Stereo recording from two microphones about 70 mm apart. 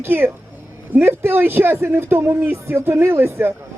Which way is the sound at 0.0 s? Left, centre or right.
Right.